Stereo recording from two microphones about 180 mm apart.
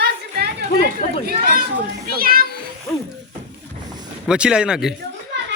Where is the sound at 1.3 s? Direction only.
55° right (ahead or behind).